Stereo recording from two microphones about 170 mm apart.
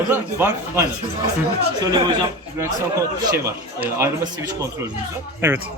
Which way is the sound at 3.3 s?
15° right (ahead or behind).